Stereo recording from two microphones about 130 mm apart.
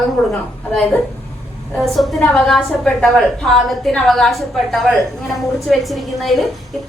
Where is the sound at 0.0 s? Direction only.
Centre (ahead or behind).